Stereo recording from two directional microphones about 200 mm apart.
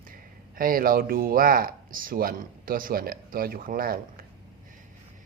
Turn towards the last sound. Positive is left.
turn(degrees=-45)  # may be behind; listen again after turning